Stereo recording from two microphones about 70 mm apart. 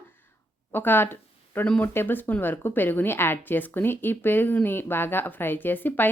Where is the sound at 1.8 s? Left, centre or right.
Left.